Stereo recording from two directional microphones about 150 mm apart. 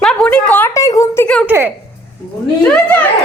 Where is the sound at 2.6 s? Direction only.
5° left (ahead or behind).